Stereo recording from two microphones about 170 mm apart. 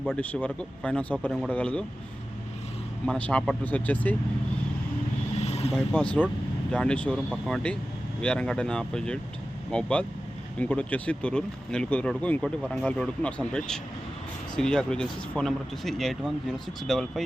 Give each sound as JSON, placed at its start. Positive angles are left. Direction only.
{"t": 0.0, "sound": "speech", "side_deg": 5}
{"t": 3.1, "sound": "speech", "side_deg": 5}
{"t": 5.4, "sound": "vehicle", "side_deg": 40}
{"t": 5.7, "sound": "speech", "side_deg": 5}